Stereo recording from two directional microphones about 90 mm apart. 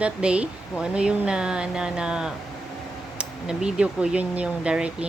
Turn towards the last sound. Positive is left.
turn(degrees=-10)  # may be behind; listen again after turning